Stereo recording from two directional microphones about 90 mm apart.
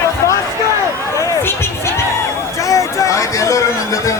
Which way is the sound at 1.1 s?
35° left (ahead or behind).